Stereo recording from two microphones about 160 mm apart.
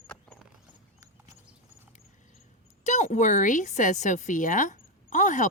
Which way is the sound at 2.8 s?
50° left (ahead or behind).